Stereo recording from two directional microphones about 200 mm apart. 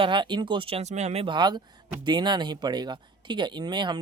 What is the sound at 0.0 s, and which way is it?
Speech, 25° right (ahead or behind).